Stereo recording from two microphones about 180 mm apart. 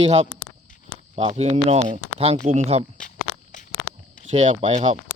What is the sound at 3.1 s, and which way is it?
Walk, 45° left (ahead or behind).